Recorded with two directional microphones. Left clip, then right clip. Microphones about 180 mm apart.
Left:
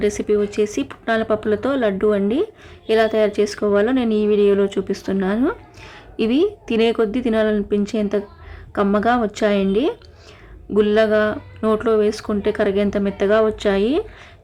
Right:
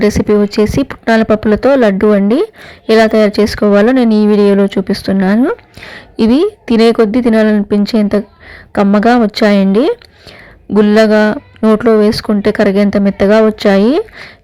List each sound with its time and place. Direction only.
0.0 s speech: 35° right (ahead or behind)